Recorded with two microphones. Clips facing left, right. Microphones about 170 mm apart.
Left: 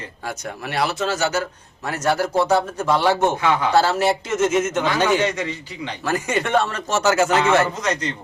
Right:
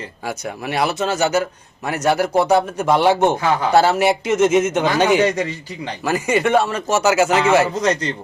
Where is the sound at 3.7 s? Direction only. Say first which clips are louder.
Right 5 dB; 15° right (ahead or behind).